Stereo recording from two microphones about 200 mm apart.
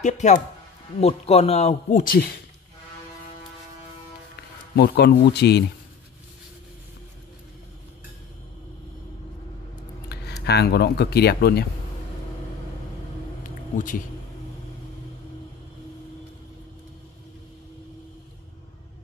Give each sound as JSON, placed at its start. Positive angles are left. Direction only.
{"t": 0.0, "sound": "a man's voice", "side_deg": 35}
{"t": 4.7, "sound": "speech", "side_deg": 55}
{"t": 10.4, "sound": "speech", "side_deg": 55}
{"t": 13.7, "sound": "a man's voice", "side_deg": 40}